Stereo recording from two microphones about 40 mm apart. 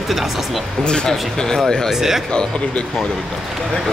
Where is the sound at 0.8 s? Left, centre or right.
Left.